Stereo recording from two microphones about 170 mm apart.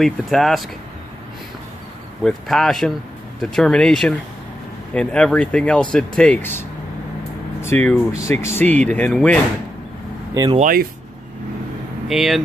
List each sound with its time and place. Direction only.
0.0 s speech: centre (ahead or behind)
2.2 s speech: centre (ahead or behind)
7.6 s speech: 10° left (ahead or behind)
10.3 s speech: 25° right (ahead or behind)
10.6 s speech: 60° right (ahead or behind)
12.1 s speech: centre (ahead or behind)